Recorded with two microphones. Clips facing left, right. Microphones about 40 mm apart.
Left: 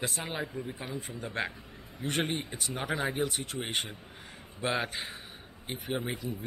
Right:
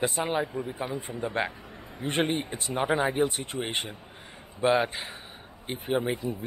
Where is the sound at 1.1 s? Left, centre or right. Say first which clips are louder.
Right 4 dB; right.